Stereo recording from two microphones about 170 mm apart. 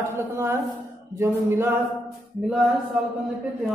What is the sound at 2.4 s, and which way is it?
Speech, centre (ahead or behind).